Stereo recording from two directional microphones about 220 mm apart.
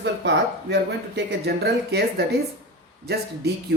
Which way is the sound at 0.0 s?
50° right (ahead or behind).